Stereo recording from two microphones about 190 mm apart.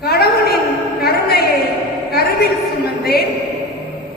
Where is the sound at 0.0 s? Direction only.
55° left (ahead or behind).